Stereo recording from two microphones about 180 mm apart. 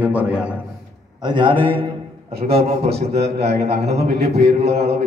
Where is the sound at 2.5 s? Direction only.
60° right (ahead or behind).